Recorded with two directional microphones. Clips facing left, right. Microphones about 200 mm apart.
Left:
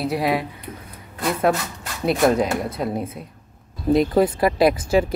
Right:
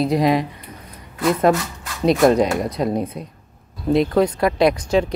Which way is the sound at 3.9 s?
Centre (ahead or behind).